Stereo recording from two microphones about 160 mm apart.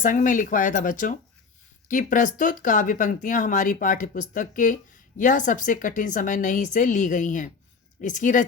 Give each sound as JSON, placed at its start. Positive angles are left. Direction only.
{"t": 0.0, "sound": "speech", "side_deg": 55}